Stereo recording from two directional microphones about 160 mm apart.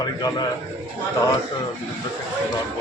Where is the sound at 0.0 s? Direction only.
20° left (ahead or behind).